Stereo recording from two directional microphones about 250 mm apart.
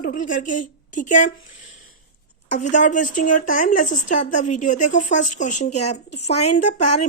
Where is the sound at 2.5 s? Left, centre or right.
Left.